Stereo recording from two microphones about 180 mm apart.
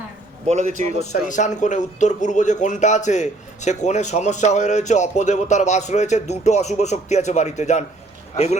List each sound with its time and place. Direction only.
0.4 s a man's voice: 40° right (ahead or behind)
1.3 s speech: 40° left (ahead or behind)